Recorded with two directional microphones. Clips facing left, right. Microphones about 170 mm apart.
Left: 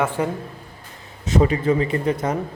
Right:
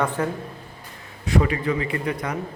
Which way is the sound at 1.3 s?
25° left (ahead or behind).